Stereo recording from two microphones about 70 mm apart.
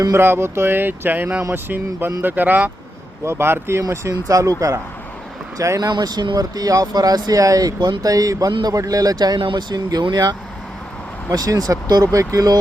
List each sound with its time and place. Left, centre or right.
0.1 s music: right
2.2 s speech: right
3.2 s music: right
4.1 s speech: right
5.9 s speech: right
7.8 s speech: right
11.3 s speech: right
12.1 s speech: right